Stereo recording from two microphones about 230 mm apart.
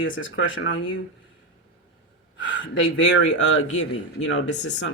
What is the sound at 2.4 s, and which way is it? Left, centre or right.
Speech, left.